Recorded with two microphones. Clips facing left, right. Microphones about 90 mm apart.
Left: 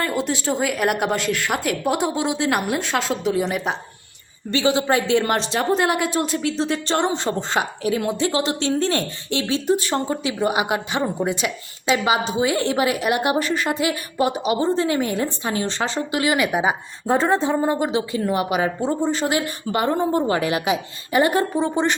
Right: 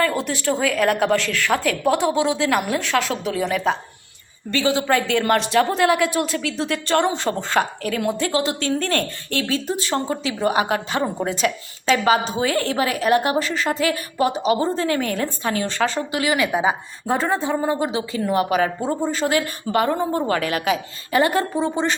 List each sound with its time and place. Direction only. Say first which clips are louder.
0.0 s a woman's voice: right 2 dB; 20° left (ahead or behind)
15.5 s speech: right 2 dB; 25° left (ahead or behind)